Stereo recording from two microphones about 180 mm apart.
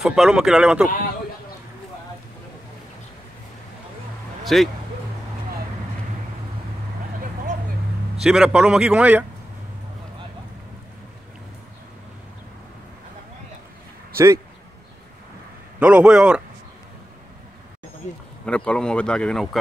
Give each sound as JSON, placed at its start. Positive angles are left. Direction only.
{"t": 0.0, "sound": "speech", "side_deg": 0}
{"t": 4.5, "sound": "speech", "side_deg": 0}
{"t": 8.2, "sound": "speech", "side_deg": -5}
{"t": 14.1, "sound": "speech", "side_deg": -15}
{"t": 15.8, "sound": "speech", "side_deg": -5}
{"t": 18.4, "sound": "speech", "side_deg": 5}